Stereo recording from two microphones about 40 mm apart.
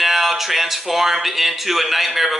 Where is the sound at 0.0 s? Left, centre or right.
Centre.